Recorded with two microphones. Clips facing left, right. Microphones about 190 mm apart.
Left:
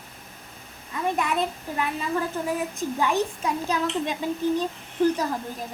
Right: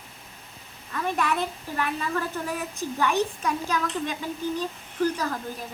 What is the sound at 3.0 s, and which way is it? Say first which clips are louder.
Speech: even; 25° left (ahead or behind).